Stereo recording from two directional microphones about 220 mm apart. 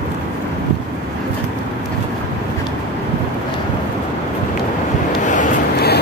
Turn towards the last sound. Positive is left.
turn(degrees=40)  # may be behind; listen again after turning